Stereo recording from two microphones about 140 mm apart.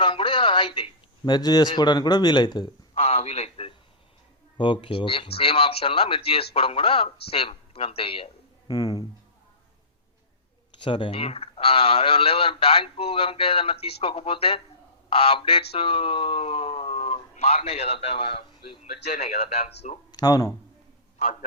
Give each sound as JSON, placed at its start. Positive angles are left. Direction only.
{"t": 0.0, "sound": "a man's voice", "side_deg": 35}
{"t": 3.0, "sound": "a sound", "side_deg": 50}
{"t": 4.5, "sound": "speech", "side_deg": 35}
{"t": 8.7, "sound": "speech", "side_deg": 30}
{"t": 10.8, "sound": "speech", "side_deg": 35}
{"t": 20.1, "sound": "speech", "side_deg": 30}